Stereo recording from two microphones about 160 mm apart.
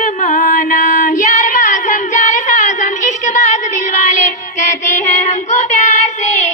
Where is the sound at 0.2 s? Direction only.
50° left (ahead or behind).